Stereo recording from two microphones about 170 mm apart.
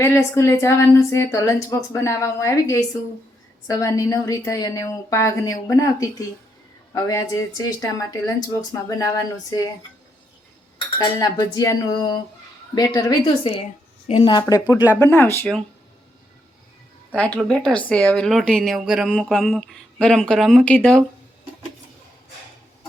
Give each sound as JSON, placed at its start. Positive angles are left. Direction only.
{"t": 0.0, "sound": "a woman's voice", "side_deg": 15}
{"t": 10.9, "sound": "a woman's voice", "side_deg": 25}
{"t": 17.2, "sound": "speech", "side_deg": 5}